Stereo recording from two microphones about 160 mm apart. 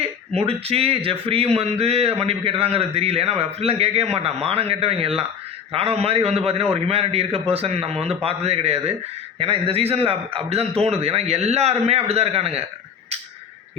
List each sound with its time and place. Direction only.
0.0 s a man's voice: 40° right (ahead or behind)